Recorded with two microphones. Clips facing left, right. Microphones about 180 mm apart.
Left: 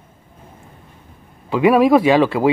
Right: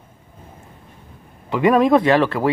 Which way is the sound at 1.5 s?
5° left (ahead or behind).